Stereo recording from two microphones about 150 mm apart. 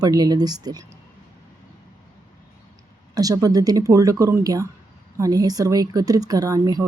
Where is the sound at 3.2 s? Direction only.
25° right (ahead or behind).